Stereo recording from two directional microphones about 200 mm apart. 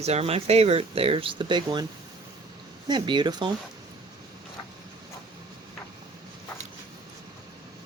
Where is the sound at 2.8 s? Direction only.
20° right (ahead or behind).